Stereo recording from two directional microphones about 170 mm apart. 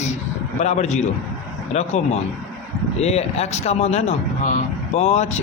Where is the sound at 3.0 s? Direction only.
40° left (ahead or behind).